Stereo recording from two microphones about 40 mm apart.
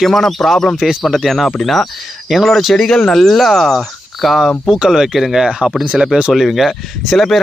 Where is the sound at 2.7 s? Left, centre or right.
Centre.